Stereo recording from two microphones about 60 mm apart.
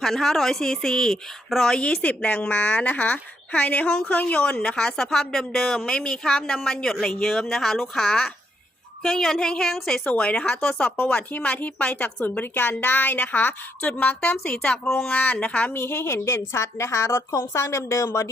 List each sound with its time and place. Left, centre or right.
0.0 s a woman's voice: centre
2.0 s a woman's voice: left; by 10.0 s centre
10.0 s a woman's voice: left
11.3 s speech: left
14.4 s a woman's voice: centre
14.8 s speech: left
15.1 s speech: left
15.7 s a woman's voice: left